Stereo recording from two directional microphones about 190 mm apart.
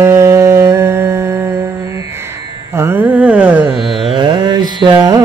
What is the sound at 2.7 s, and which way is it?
Carnatic music, 10° right (ahead or behind).